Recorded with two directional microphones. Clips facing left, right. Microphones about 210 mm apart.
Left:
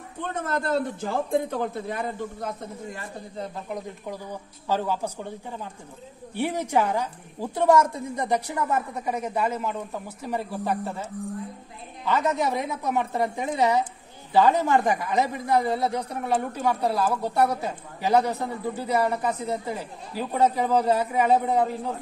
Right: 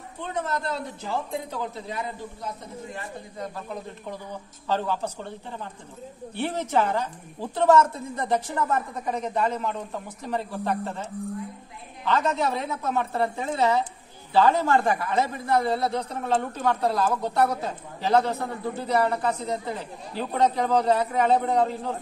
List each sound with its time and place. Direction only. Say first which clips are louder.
0.3 s speech: left 3 dB; 50° left (ahead or behind)
3.3 s a man's voice: left 2 dB; 20° left (ahead or behind)